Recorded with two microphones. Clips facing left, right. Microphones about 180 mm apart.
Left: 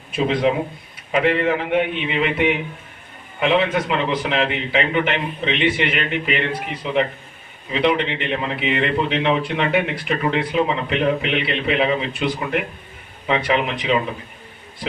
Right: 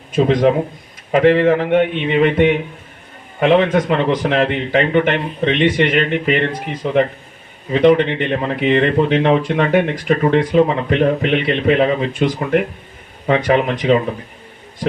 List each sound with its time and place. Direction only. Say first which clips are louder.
0.1 s a man's voice: right 5 dB; 45° right (ahead or behind)